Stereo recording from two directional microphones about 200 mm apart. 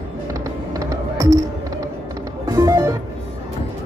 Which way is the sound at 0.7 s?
15° right (ahead or behind).